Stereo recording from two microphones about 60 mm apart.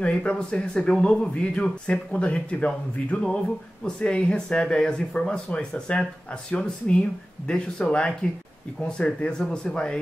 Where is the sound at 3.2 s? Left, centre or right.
Centre.